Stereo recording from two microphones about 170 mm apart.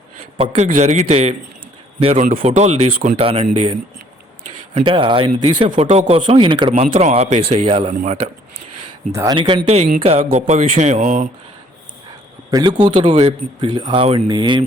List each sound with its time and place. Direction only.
0.3 s speech: 40° right (ahead or behind)
9.1 s speech: 25° right (ahead or behind)
9.6 s speech: 40° right (ahead or behind)
12.5 s speech: 25° right (ahead or behind)